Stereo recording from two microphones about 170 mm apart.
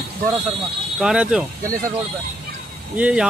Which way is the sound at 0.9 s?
5° right (ahead or behind).